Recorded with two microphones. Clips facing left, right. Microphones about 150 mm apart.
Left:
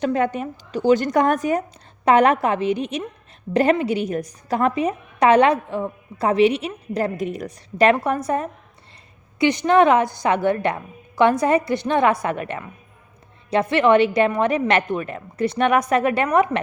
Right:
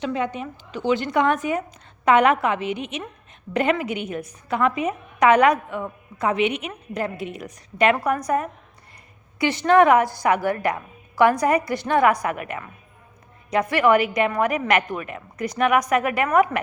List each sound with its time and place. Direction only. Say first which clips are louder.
0.0 s speech: left 5 dB; 50° left (ahead or behind)
0.4 s a woman's voice: left 5 dB; 35° left (ahead or behind)
9.4 s a woman's voice: left 1 dB; 15° left (ahead or behind)